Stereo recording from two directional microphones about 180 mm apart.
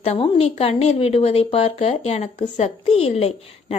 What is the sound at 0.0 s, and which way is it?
A woman's voice, 35° left (ahead or behind).